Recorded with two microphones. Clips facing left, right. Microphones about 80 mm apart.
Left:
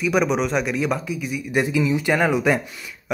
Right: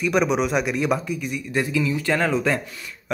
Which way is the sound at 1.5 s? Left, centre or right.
Centre.